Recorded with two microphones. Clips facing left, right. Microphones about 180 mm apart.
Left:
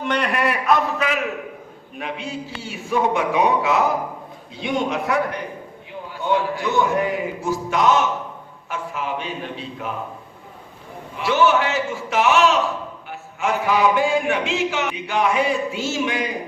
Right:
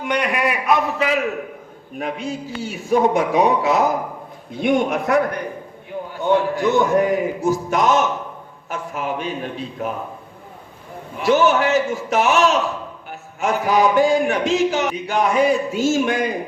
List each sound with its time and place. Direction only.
0.0 s a man's voice: 10° right (ahead or behind)
0.9 s a man's voice: 25° right (ahead or behind)
2.0 s a man's voice: 40° right (ahead or behind)
4.5 s a man's voice: 50° right (ahead or behind)
6.2 s a man's voice: 45° right (ahead or behind)
11.2 s a man's voice: 45° right (ahead or behind)